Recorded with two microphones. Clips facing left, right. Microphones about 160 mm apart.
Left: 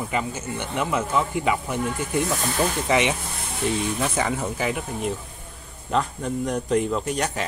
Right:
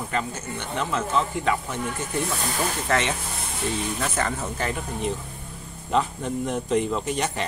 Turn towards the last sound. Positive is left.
turn(degrees=0)  # may be behind; listen again after turning